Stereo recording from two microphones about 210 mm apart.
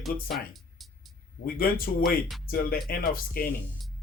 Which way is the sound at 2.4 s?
45° left (ahead or behind).